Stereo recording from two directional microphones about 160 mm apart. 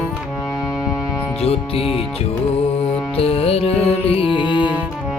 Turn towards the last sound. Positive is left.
turn(degrees=30)  # may be behind; listen again after turning